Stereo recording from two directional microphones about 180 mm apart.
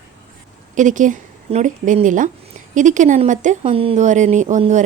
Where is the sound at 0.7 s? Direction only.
45° right (ahead or behind).